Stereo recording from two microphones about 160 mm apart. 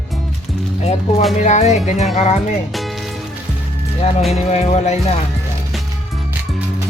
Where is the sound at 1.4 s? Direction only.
45° left (ahead or behind).